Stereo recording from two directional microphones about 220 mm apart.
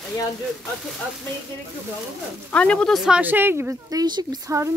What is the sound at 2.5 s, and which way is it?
Speech, 5° left (ahead or behind).